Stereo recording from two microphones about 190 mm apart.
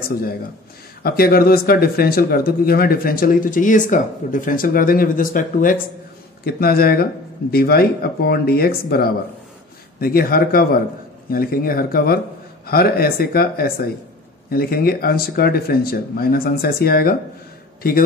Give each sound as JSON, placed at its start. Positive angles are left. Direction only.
{"t": 1.0, "sound": "speech", "side_deg": 50}